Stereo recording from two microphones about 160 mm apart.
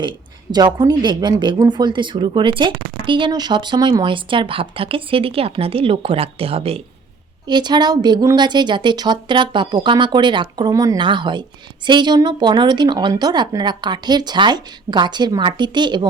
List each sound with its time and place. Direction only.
0.5 s a woman's voice: 25° right (ahead or behind)